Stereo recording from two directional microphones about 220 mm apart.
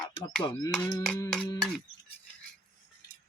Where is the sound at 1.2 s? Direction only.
15° left (ahead or behind).